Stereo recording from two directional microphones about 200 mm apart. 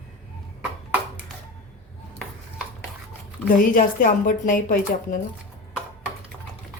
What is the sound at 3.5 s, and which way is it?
Speech, 40° left (ahead or behind).